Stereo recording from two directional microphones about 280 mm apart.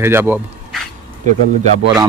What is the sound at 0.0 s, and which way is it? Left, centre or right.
Speech, centre.